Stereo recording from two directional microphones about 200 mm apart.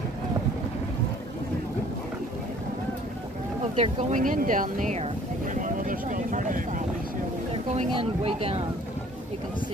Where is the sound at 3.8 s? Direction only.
35° right (ahead or behind).